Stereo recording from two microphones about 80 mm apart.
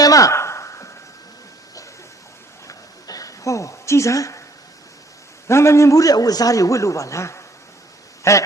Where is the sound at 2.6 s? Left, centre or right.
Left.